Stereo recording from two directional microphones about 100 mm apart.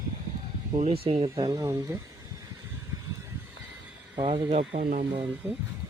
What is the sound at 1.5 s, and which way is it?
Speech, 35° right (ahead or behind).